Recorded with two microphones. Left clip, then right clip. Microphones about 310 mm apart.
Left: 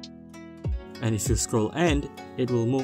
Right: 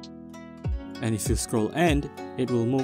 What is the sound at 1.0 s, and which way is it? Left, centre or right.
Speech, right.